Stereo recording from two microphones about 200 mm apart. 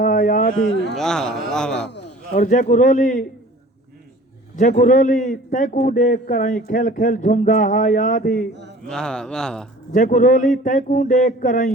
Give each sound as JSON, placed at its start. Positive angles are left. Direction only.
{"t": 0.0, "sound": "a sound", "side_deg": 40}
{"t": 0.9, "sound": "a man's voice", "side_deg": 5}
{"t": 2.3, "sound": "a man's voice", "side_deg": 40}
{"t": 4.5, "sound": "a man's voice", "side_deg": 40}
{"t": 8.9, "sound": "a man's voice", "side_deg": 5}
{"t": 9.9, "sound": "a man's voice", "side_deg": 40}